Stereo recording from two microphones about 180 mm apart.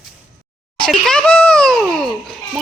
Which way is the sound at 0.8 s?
5° left (ahead or behind).